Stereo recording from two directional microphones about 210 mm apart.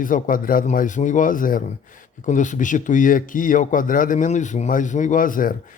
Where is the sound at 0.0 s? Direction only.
40° left (ahead or behind).